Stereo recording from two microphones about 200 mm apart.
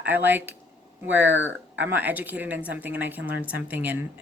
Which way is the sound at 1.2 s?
65° right (ahead or behind).